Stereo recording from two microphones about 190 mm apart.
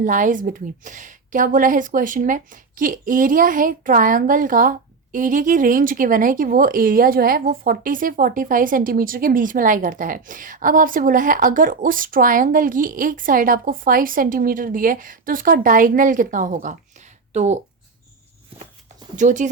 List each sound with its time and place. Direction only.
0.0 s a woman's voice: 45° right (ahead or behind)
19.1 s speech: 40° right (ahead or behind)